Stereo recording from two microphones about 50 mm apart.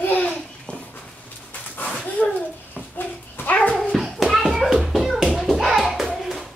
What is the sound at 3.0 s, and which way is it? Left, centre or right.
Dog, left.